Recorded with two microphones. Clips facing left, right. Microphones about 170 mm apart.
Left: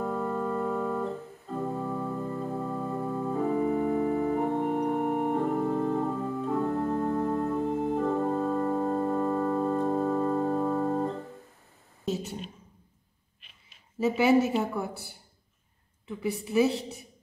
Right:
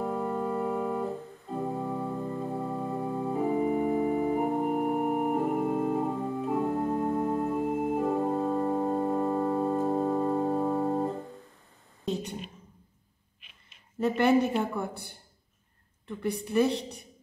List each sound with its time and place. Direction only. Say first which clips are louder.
0.0 s organ: even; 25° right (ahead or behind)
12.1 s a sound: even; 5° left (ahead or behind)
13.4 s a woman's voice: even; centre (ahead or behind)